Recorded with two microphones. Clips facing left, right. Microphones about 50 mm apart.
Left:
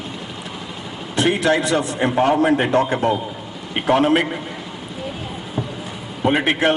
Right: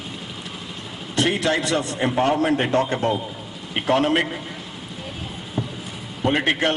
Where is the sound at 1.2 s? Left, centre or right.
Centre.